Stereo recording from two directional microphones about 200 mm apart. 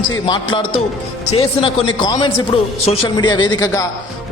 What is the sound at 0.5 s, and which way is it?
A man's voice, 25° left (ahead or behind).